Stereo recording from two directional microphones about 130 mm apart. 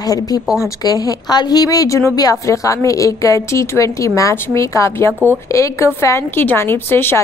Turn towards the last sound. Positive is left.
turn(degrees=15)  # may be behind; listen again after turning